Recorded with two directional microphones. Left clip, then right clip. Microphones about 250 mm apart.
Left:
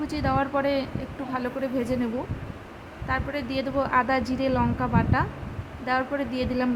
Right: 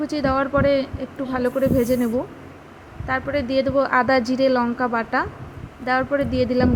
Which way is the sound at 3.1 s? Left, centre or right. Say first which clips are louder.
Right 6 dB; centre.